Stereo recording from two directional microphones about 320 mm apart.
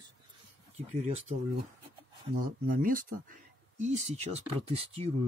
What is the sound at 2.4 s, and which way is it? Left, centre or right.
Speech, right.